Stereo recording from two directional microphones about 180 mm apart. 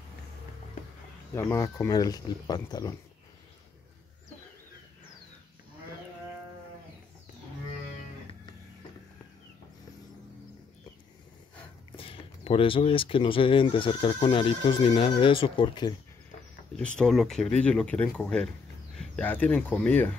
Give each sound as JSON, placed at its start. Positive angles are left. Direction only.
{"t": 1.3, "sound": "speech", "side_deg": 15}
{"t": 12.0, "sound": "speech", "side_deg": 30}
{"t": 16.7, "sound": "speech", "side_deg": 5}